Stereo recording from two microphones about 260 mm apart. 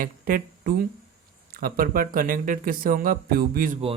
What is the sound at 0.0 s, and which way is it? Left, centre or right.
Speech, right.